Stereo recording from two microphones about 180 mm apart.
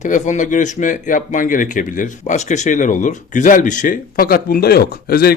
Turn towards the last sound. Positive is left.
turn(degrees=60)  # may be behind; listen again after turning